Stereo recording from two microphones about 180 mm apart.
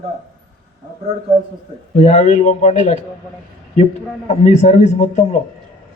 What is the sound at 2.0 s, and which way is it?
A man's voice, 40° left (ahead or behind).